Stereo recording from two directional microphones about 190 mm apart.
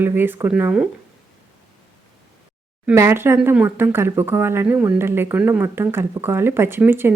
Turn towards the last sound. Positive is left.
turn(degrees=-10)  # may be behind; listen again after turning